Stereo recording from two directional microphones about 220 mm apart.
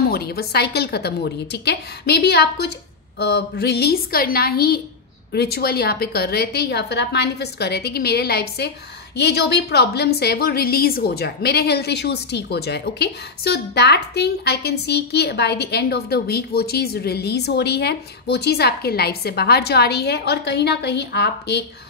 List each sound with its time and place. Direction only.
0.1 s a woman's voice: 45° left (ahead or behind)